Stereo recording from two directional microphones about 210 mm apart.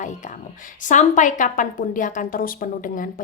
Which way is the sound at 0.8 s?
35° left (ahead or behind).